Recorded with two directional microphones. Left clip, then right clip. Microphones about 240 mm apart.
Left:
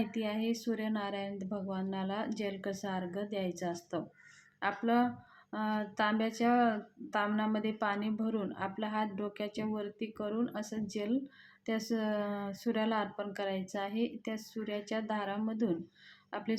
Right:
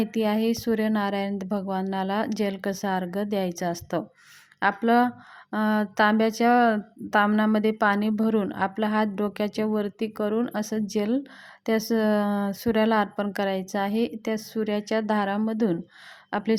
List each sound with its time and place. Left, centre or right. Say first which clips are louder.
0.0 s speech: right 11 dB; right